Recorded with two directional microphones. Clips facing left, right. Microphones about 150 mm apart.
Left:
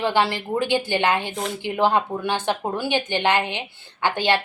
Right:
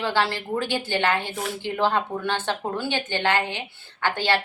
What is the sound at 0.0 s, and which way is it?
A woman's voice, 15° left (ahead or behind).